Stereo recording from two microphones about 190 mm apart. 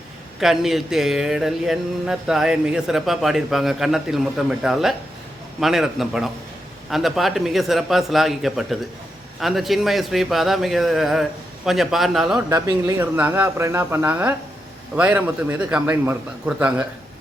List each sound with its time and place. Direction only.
0.3 s speech: centre (ahead or behind)
12.5 s speech: 15° right (ahead or behind)